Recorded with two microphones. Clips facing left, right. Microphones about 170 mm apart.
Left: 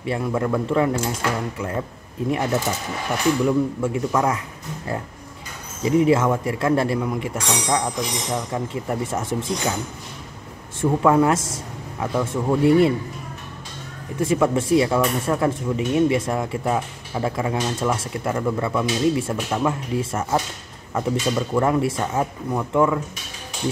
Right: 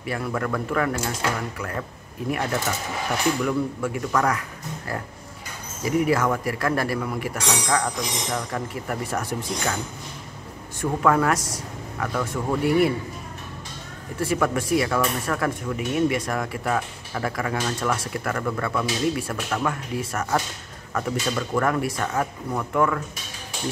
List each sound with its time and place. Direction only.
0.0 s speech: 20° left (ahead or behind)
5.8 s speech: 25° left (ahead or behind)
10.8 s speech: 20° left (ahead or behind)
14.1 s speech: 20° left (ahead or behind)